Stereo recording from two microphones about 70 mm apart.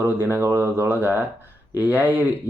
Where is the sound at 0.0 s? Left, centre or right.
Right.